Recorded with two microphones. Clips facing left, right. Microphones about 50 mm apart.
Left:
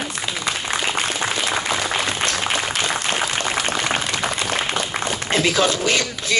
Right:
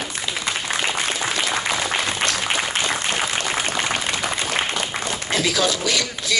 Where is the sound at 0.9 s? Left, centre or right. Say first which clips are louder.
Left 1 dB; left.